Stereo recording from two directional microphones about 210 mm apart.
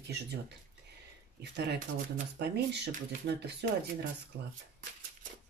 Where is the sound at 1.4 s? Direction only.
50° right (ahead or behind).